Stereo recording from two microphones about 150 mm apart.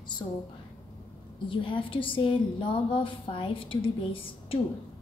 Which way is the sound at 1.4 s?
35° left (ahead or behind).